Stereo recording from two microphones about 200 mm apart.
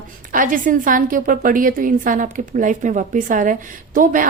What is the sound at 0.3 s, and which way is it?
A woman's voice, 40° right (ahead or behind).